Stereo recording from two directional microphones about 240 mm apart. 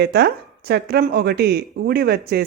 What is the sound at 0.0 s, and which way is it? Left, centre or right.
Speech, right.